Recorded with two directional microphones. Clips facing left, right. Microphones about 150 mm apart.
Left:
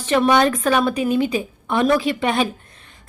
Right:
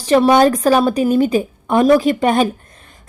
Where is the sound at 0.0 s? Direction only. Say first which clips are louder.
Right 5 dB; 35° right (ahead or behind).